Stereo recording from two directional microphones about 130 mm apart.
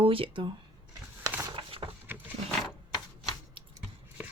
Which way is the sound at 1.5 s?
40° right (ahead or behind).